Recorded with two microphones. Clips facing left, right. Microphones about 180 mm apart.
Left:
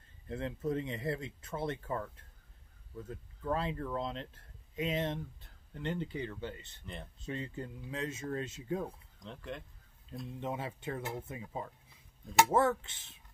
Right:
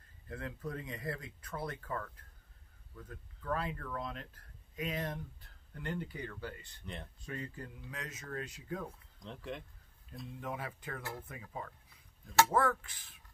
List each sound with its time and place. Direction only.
0.3 s speech: 25° left (ahead or behind)
9.2 s speech: centre (ahead or behind)
10.4 s speech: 25° left (ahead or behind)